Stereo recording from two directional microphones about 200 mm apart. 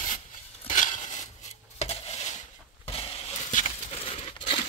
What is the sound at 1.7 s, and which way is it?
Coin, 35° left (ahead or behind).